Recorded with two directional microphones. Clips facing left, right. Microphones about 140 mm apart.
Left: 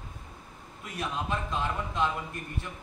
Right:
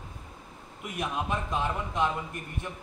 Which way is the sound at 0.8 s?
20° right (ahead or behind).